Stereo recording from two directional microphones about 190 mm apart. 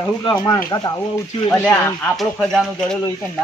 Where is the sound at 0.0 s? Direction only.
20° left (ahead or behind).